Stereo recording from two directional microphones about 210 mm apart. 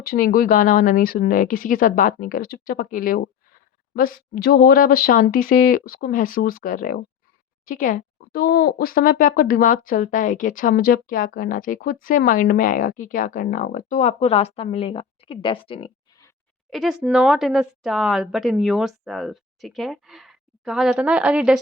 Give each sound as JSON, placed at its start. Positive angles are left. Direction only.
{"t": 0.0, "sound": "speech", "side_deg": 45}
{"t": 16.6, "sound": "speech", "side_deg": 0}